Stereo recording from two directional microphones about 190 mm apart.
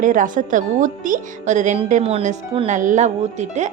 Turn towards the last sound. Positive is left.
turn(degrees=-40)  # may be behind; listen again after turning